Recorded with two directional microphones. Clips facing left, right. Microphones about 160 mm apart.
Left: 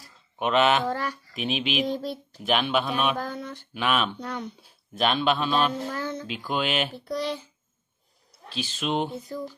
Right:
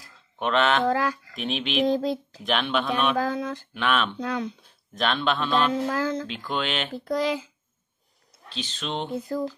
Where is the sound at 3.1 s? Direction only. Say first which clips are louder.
Right 6 dB; 90° right.